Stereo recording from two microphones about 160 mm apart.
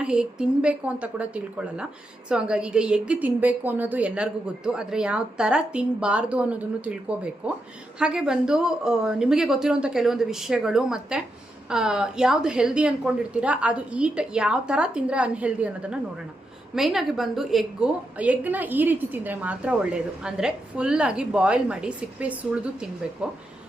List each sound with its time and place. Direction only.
0.0 s a woman's voice: 5° right (ahead or behind)